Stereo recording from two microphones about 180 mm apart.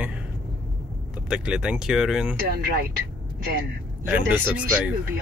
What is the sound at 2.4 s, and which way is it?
Speech, 60° right (ahead or behind).